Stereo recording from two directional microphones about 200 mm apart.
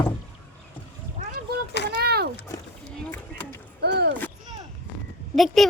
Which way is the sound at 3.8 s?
55° right (ahead or behind).